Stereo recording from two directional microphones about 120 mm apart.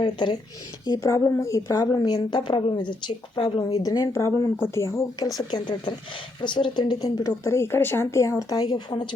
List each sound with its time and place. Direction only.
0.0 s a woman's voice: 40° left (ahead or behind)
0.9 s a woman's voice: 25° left (ahead or behind)
5.4 s a woman's voice: 40° left (ahead or behind)